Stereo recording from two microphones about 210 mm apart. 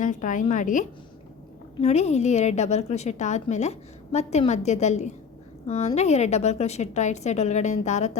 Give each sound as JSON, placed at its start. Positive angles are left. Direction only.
{"t": 0.0, "sound": "a woman's voice", "side_deg": 40}